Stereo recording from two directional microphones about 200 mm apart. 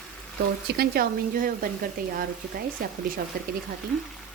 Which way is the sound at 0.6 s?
50° right (ahead or behind).